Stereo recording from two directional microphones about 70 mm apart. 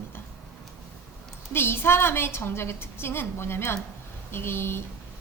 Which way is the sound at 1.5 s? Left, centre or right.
Left.